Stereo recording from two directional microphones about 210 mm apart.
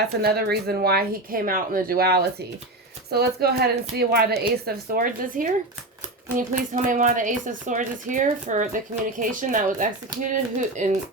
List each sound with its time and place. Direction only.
0.2 s speech: 50° right (ahead or behind)